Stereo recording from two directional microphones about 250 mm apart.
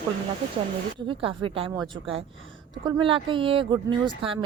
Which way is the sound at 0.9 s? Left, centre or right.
Centre.